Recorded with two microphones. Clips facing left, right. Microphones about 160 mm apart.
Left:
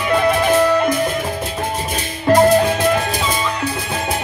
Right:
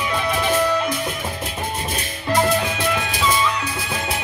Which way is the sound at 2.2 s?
45° left (ahead or behind).